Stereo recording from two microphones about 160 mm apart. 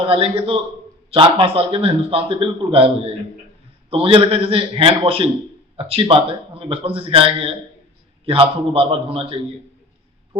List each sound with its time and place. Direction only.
0.0 s a man's voice: 35° right (ahead or behind)